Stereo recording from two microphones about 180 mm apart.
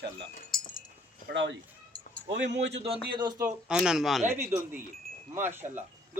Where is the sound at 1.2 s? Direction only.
70° right (ahead or behind).